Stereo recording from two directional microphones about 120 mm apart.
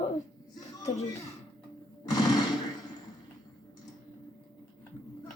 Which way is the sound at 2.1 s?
35° left (ahead or behind).